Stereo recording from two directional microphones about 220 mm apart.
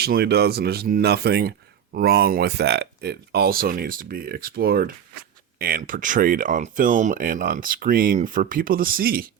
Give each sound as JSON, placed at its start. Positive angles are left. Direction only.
{"t": 0.0, "sound": "speech", "side_deg": -45}